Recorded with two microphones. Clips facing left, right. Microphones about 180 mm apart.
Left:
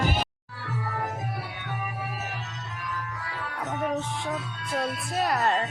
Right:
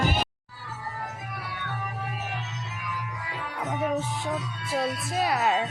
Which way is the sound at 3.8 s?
5° right (ahead or behind).